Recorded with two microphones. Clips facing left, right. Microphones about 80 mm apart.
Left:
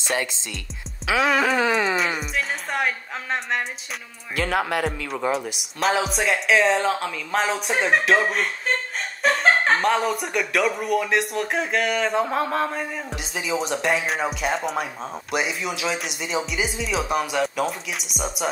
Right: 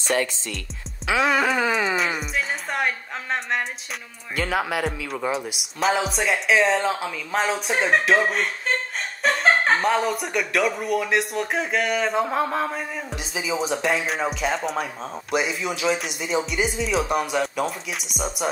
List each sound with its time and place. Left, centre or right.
0.0 s speech: centre
1.0 s speech: centre